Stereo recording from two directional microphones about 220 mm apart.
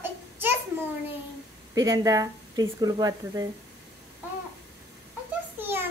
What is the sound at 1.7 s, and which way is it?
Speech, 15° right (ahead or behind).